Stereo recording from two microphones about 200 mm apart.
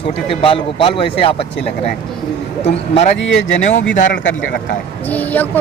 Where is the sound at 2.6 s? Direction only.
30° left (ahead or behind).